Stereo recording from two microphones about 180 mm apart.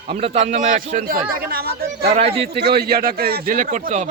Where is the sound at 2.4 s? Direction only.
65° right (ahead or behind); by 4.1 s 40° right (ahead or behind).